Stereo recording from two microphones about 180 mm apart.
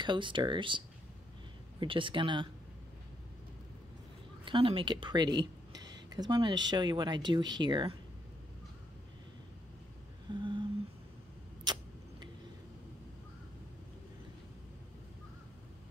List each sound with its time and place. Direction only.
0.0 s speech: 25° right (ahead or behind)
4.5 s speech: 30° right (ahead or behind)
10.3 s speech: 25° right (ahead or behind)
11.6 s tick-tock: 25° right (ahead or behind)